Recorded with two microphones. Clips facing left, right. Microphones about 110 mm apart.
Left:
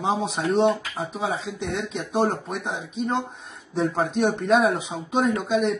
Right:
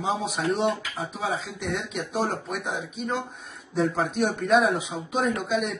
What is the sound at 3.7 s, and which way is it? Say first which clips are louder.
Speech: left 1 dB; centre (ahead or behind).